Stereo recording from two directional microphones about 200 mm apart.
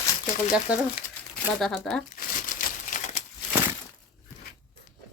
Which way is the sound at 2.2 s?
40° left (ahead or behind).